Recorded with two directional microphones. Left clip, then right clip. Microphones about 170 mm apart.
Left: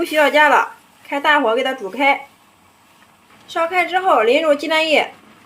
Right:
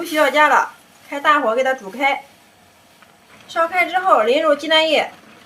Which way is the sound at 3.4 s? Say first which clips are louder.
Even; 20° left (ahead or behind).